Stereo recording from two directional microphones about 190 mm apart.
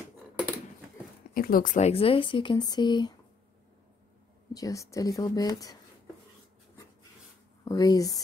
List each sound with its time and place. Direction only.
1.3 s speech: 50° left (ahead or behind); by 3.2 s 25° left (ahead or behind)
4.6 s speech: 15° left (ahead or behind)
7.6 s speech: 20° left (ahead or behind)